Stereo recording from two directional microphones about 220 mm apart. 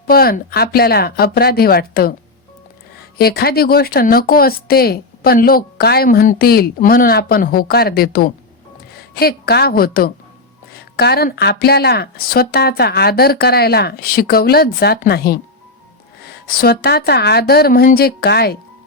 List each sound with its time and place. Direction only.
0.1 s speech: 45° left (ahead or behind)
3.2 s a woman's voice: 45° left (ahead or behind)